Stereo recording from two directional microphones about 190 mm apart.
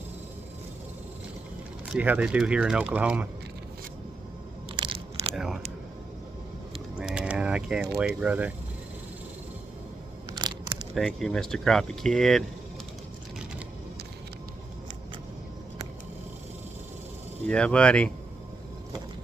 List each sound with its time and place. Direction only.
1.9 s speech: 5° right (ahead or behind)
4.7 s crunch: 25° right (ahead or behind)
5.3 s biting: centre (ahead or behind)
7.0 s mechanisms: 5° right (ahead or behind)
8.2 s speech: 10° right (ahead or behind)
10.3 s a sound: 20° right (ahead or behind)
11.0 s speech: centre (ahead or behind)
17.5 s speech: 5° left (ahead or behind)